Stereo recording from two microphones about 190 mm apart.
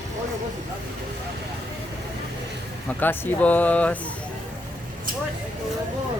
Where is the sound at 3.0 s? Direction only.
10° left (ahead or behind).